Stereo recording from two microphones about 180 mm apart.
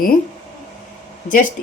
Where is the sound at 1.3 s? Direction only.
45° left (ahead or behind).